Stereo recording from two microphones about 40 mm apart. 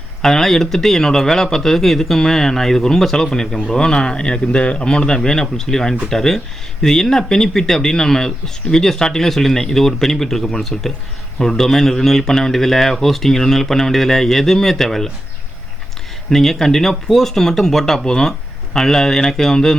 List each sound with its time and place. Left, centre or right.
0.2 s a man's voice: centre
16.3 s a man's voice: centre